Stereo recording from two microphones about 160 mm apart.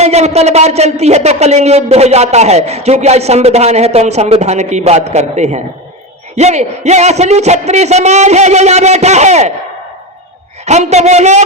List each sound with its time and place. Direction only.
0.0 s speech: 45° right (ahead or behind)
10.7 s speech: 45° right (ahead or behind)